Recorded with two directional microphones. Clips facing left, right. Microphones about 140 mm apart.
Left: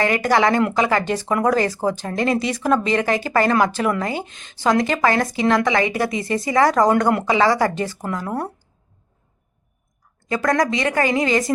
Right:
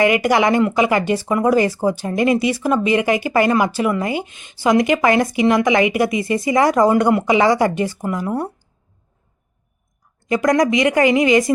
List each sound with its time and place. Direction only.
0.0 s speech: 15° right (ahead or behind)
10.2 s speech: 15° right (ahead or behind)